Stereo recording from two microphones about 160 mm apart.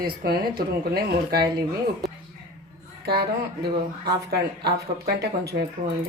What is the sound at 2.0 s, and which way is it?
Speech, centre (ahead or behind).